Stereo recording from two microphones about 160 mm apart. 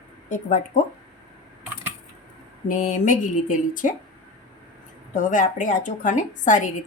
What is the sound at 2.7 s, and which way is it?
A woman's voice, 50° left (ahead or behind).